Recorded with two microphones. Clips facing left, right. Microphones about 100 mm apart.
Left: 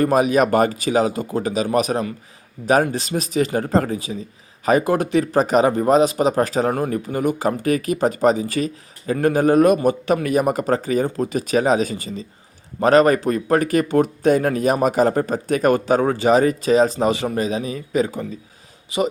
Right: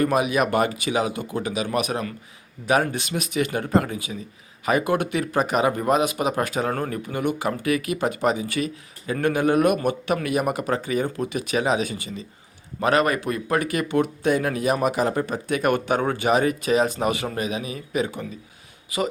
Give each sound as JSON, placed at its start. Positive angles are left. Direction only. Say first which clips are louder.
{"t": 0.0, "sound": "speech", "louder": "left 5 dB", "side_deg": 40}
{"t": 6.7, "sound": "speech", "louder": "left 5 dB", "side_deg": 20}
{"t": 6.9, "sound": "speech", "louder": "left 4 dB", "side_deg": 35}